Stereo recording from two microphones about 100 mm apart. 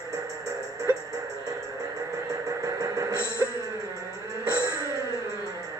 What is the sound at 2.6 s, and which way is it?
Music, 35° right (ahead or behind).